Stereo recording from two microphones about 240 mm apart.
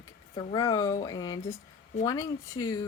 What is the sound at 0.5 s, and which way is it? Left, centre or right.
Speech, centre.